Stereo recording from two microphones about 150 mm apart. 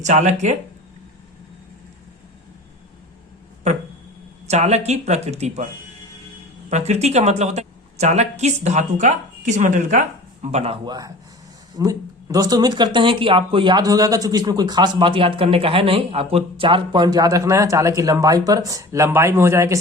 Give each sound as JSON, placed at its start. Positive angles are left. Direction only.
{"t": 0.0, "sound": "a woman's voice", "side_deg": -55}
{"t": 3.6, "sound": "a sound", "side_deg": -50}
{"t": 4.4, "sound": "a woman's voice", "side_deg": -45}
{"t": 6.7, "sound": "a woman's voice", "side_deg": -50}
{"t": 11.8, "sound": "speech", "side_deg": -25}